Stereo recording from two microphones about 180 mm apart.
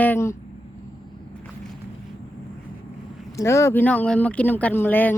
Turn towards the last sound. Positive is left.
turn(degrees=10)  # may be behind; listen again after turning